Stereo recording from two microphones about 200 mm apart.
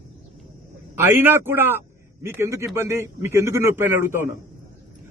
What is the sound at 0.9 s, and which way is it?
Speech, 10° right (ahead or behind).